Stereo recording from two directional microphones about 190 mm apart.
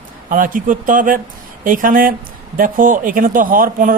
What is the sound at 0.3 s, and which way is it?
Speech, 45° right (ahead or behind).